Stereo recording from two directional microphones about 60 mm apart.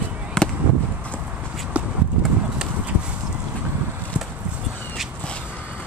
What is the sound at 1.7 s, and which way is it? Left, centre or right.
Horse, right.